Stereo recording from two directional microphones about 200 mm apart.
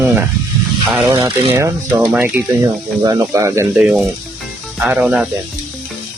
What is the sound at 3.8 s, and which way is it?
Speech, centre (ahead or behind).